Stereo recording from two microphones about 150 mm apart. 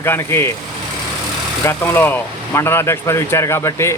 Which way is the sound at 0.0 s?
15° left (ahead or behind).